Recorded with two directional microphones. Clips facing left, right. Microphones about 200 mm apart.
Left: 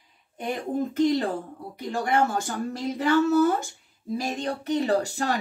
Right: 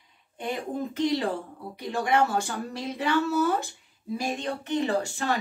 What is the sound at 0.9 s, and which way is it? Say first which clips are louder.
Speech: left 4 dB; 45° left (ahead or behind).